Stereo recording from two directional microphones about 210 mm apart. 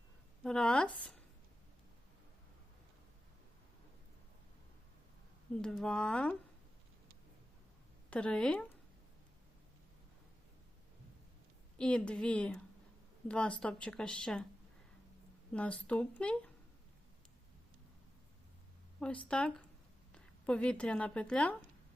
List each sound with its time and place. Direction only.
0.4 s speech: 5° left (ahead or behind)
5.6 s speech: 5° left (ahead or behind)
8.1 s speech: 5° left (ahead or behind)
11.8 s speech: 5° left (ahead or behind)
15.5 s speech: 5° left (ahead or behind)
18.9 s a woman's voice: 5° left (ahead or behind)